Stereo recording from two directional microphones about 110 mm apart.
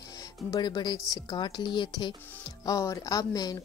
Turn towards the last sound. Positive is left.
turn(degrees=35)  # may be behind; listen again after turning